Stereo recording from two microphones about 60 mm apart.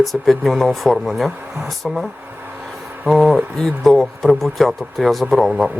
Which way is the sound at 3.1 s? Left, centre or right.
Centre.